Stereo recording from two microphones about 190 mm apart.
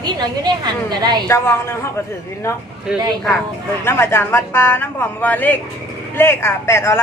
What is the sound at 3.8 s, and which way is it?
Speech, 10° left (ahead or behind).